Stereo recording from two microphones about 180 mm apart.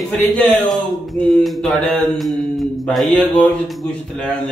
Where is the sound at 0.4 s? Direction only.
10° left (ahead or behind).